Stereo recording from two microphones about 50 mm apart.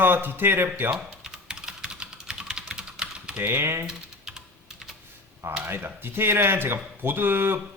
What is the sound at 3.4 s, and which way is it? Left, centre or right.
Speech, right.